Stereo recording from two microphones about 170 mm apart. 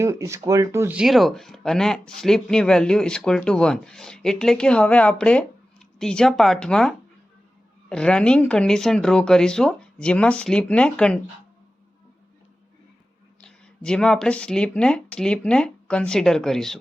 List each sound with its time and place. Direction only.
0.0 s speech: 15° right (ahead or behind)
0.9 s speech: centre (ahead or behind)
13.4 s speech: 5° left (ahead or behind)